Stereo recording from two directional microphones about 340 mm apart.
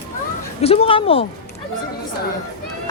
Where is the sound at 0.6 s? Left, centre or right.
Centre.